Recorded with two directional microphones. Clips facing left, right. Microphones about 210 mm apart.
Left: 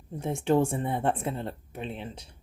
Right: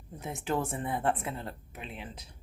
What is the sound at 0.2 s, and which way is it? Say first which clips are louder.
Speech: left 8 dB; 30° left (ahead or behind).